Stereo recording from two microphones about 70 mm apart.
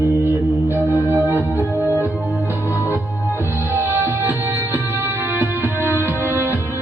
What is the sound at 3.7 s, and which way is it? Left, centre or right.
Music, right.